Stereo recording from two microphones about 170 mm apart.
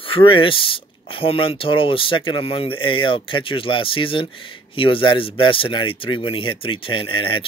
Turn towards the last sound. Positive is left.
turn(degrees=30)  # may be behind; listen again after turning